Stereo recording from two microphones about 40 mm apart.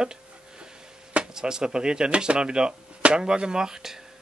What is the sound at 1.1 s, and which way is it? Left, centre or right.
Speech, right.